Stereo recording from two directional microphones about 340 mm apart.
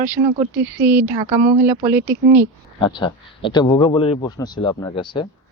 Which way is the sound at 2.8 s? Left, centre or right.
Centre.